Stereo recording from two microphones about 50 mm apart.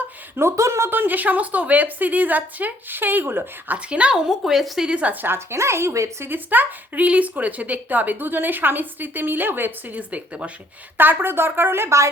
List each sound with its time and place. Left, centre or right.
0.3 s speech: right
0.9 s speech: right
3.8 s speech: right
4.3 s a woman's voice: centre
4.9 s speech: right
5.2 s speech: right
5.5 s speech: right
6.2 s speech: right
10.0 s speech: right
10.9 s speech: right